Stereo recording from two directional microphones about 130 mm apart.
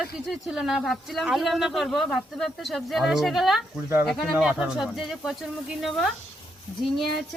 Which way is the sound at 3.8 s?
20° right (ahead or behind).